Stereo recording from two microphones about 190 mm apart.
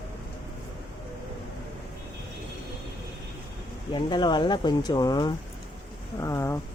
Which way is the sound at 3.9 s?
25° left (ahead or behind).